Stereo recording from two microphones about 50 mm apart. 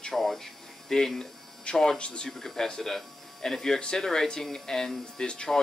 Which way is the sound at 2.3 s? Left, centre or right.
Centre.